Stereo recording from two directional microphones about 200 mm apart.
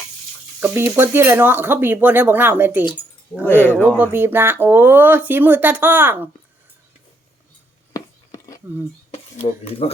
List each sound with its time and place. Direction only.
0.6 s speech: 10° right (ahead or behind)
3.8 s speech: 10° right (ahead or behind)
7.9 s a sound: 15° left (ahead or behind)
9.1 s speech: 30° left (ahead or behind)